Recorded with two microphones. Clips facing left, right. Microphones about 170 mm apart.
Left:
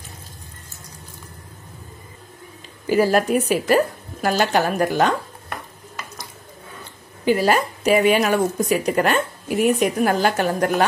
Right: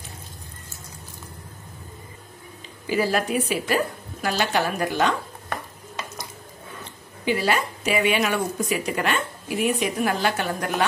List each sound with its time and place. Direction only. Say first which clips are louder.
2.9 s speech: left 6 dB; 45° left (ahead or behind)
7.2 s speech: left 5 dB; 45° left (ahead or behind)